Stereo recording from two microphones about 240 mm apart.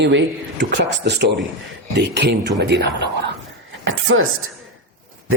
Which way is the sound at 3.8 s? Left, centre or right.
Right.